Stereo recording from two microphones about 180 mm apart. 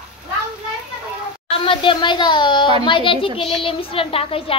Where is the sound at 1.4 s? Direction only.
30° left (ahead or behind).